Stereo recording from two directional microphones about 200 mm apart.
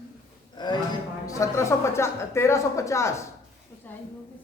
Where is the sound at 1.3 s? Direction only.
15° left (ahead or behind).